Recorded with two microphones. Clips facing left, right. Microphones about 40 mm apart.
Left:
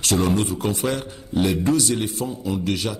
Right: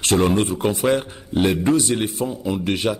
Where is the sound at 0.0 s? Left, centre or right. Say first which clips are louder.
Right 3 dB; right.